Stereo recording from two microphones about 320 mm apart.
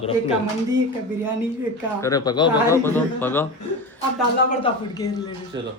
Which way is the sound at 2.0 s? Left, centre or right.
Centre.